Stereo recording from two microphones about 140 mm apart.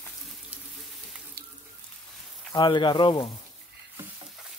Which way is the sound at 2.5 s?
30° left (ahead or behind).